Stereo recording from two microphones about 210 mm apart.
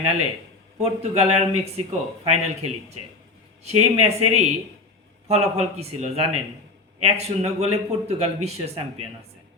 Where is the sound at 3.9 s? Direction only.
30° right (ahead or behind).